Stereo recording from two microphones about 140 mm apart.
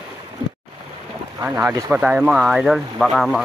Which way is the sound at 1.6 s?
25° right (ahead or behind).